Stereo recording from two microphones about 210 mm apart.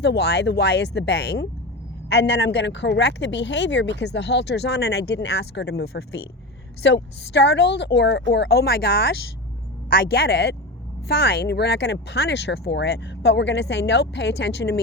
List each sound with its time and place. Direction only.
0.0 s speech: 55° left (ahead or behind)